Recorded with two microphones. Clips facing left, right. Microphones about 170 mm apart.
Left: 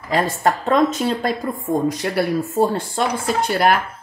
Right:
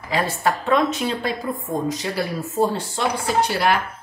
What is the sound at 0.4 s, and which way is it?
Speech, 40° left (ahead or behind).